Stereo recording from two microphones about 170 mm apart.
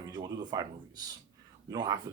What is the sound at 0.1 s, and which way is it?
Speech, 25° right (ahead or behind).